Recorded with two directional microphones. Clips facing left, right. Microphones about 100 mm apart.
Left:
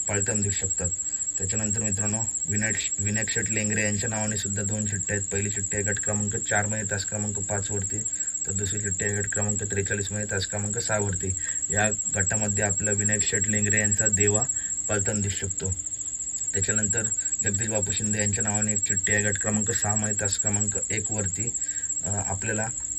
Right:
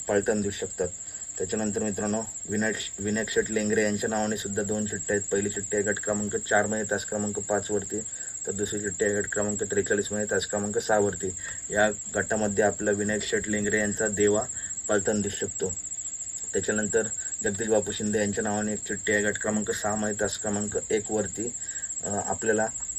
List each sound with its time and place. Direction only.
0.1 s speech: 35° right (ahead or behind)